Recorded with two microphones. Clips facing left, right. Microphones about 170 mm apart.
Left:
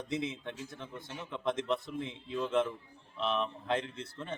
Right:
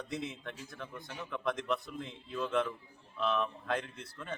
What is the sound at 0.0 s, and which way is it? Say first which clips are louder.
A man's voice: left 3 dB; 20° left (ahead or behind).